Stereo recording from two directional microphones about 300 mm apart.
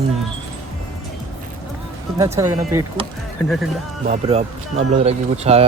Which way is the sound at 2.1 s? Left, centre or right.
Centre.